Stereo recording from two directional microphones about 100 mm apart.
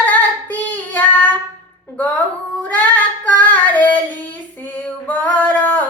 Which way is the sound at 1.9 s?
15° left (ahead or behind).